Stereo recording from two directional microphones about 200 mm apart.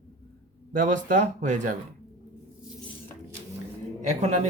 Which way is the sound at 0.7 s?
40° right (ahead or behind).